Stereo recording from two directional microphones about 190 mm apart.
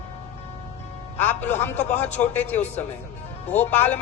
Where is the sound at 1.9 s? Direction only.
35° left (ahead or behind).